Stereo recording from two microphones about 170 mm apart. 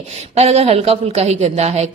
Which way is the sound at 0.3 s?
35° right (ahead or behind).